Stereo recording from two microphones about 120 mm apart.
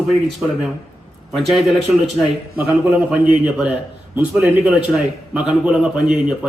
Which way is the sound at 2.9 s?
10° right (ahead or behind).